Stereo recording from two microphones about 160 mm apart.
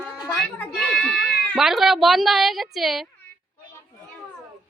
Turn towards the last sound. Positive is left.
turn(degrees=0)  # may be behind; listen again after turning